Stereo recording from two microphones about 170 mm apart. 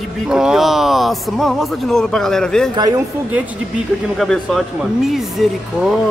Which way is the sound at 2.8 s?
20° right (ahead or behind).